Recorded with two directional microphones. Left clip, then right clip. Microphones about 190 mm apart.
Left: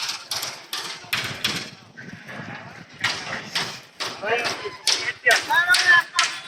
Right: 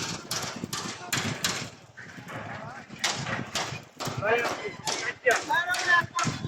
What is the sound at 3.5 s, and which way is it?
Horse, 70° right (ahead or behind).